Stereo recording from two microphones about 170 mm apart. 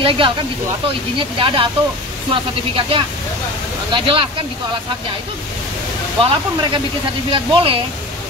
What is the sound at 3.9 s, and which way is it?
Speech, 30° right (ahead or behind).